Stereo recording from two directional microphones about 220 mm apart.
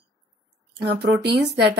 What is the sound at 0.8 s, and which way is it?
Speech, 50° right (ahead or behind).